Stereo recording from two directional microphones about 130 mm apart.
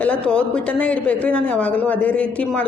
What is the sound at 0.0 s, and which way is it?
A woman's voice, 10° left (ahead or behind).